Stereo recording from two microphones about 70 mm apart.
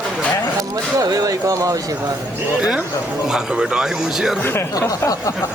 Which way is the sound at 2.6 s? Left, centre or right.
Centre.